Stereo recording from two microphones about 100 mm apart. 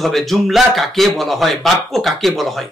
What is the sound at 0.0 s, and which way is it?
Speech, centre (ahead or behind).